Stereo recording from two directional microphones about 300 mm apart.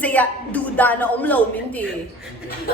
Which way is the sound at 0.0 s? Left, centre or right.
Centre.